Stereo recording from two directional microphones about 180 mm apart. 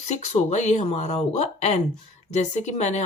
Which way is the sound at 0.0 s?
40° left (ahead or behind).